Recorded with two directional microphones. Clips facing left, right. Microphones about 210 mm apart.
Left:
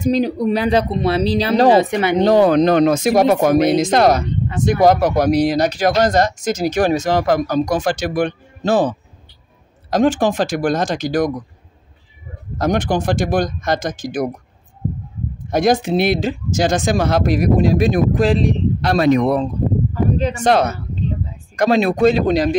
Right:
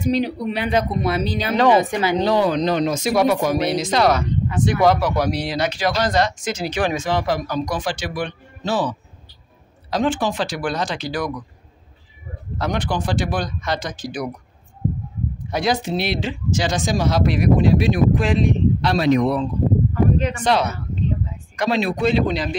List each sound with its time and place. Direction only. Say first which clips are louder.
0.0 s speech: left 4 dB; 45° left (ahead or behind)
2.2 s speech: left 9 dB; 50° left (ahead or behind)
12.5 s speech: left 6 dB; 45° left (ahead or behind)
15.4 s speech: left 6 dB; 45° left (ahead or behind)
20.2 s speech: left 2 dB; 35° left (ahead or behind)
20.4 s speech: left 6 dB; 50° left (ahead or behind)